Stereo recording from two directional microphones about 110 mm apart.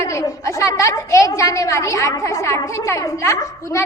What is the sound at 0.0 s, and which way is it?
A woman's voice, 30° left (ahead or behind).